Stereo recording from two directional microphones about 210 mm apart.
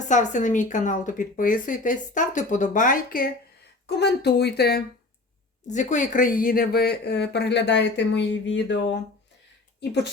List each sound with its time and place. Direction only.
0.1 s speech: 35° left (ahead or behind)
3.8 s speech: 55° left (ahead or behind)
5.6 s speech: 35° left (ahead or behind); by 8.9 s 55° left (ahead or behind)